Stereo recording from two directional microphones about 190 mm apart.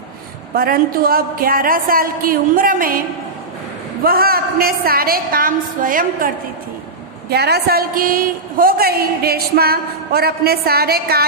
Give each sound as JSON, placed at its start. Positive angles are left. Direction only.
{"t": 0.5, "sound": "a woman's voice", "side_deg": -50}
{"t": 4.0, "sound": "a woman's voice", "side_deg": -50}
{"t": 7.3, "sound": "a woman's voice", "side_deg": -60}